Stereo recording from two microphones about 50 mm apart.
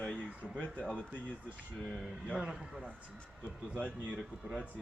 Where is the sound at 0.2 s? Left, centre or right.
Right.